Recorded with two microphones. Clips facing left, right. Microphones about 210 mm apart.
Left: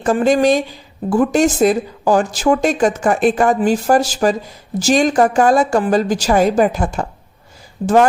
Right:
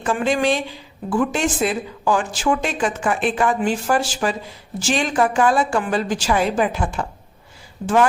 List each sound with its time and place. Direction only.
0.0 s a woman's voice: 40° left (ahead or behind)